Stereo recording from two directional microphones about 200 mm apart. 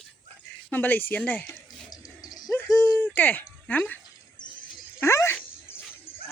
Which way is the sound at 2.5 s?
5° left (ahead or behind).